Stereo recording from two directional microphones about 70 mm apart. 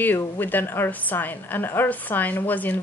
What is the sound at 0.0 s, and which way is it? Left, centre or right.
A woman's voice, left.